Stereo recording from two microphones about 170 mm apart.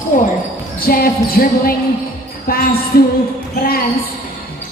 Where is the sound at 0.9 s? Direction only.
60° left (ahead or behind).